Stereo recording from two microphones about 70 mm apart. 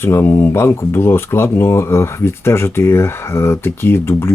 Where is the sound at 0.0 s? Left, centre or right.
Left.